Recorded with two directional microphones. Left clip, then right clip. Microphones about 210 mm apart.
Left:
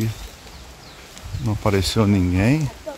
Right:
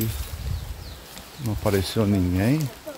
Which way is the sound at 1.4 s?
20° left (ahead or behind).